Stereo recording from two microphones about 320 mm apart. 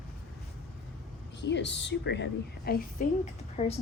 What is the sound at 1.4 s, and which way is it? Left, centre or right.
A woman's voice, left.